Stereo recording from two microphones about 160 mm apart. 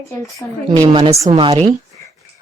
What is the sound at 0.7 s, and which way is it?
A woman's voice, 30° right (ahead or behind).